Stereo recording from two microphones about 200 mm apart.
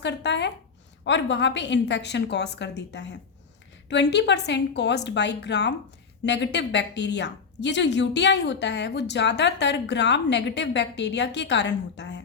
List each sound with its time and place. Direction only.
0.0 s a woman's voice: 60° left (ahead or behind)